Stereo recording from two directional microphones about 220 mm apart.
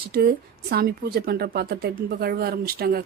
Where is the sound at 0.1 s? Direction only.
45° right (ahead or behind).